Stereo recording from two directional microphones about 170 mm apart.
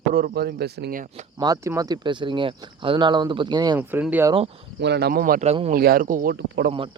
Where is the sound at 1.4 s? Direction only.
20° right (ahead or behind).